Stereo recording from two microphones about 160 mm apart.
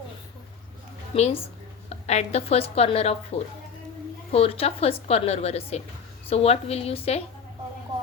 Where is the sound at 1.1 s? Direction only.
40° left (ahead or behind).